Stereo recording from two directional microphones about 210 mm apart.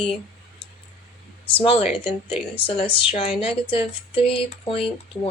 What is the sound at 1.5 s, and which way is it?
A woman's voice, 25° left (ahead or behind).